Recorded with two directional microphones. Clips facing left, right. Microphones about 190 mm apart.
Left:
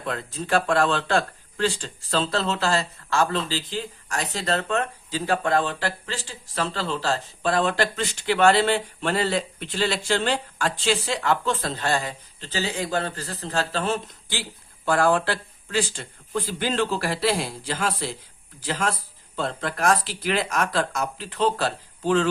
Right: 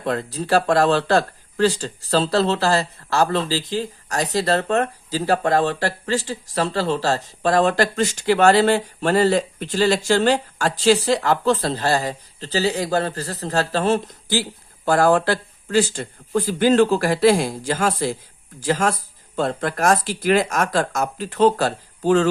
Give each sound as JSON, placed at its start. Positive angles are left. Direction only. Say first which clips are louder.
{"t": 0.0, "sound": "speech", "louder": "right 6 dB", "side_deg": -35}